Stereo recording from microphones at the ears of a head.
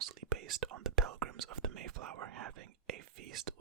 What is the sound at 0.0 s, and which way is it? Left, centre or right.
Whispering, right.